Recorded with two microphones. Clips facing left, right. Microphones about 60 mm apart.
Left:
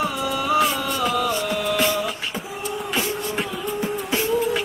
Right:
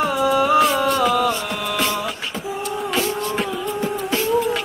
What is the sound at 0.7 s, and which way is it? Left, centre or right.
Music, right.